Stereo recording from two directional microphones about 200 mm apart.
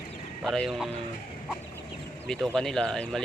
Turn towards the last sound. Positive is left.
turn(degrees=5)  # may be behind; listen again after turning